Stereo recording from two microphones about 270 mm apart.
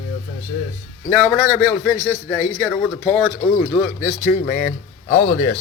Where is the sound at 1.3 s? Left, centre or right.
Centre.